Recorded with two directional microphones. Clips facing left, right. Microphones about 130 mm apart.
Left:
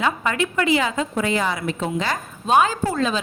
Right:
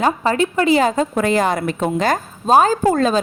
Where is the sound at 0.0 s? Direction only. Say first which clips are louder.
Right 5 dB; 35° right (ahead or behind).